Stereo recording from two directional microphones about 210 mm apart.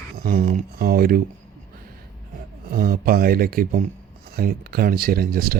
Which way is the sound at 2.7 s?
45° right (ahead or behind).